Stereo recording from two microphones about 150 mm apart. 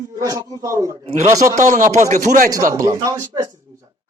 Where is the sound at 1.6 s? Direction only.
60° right (ahead or behind).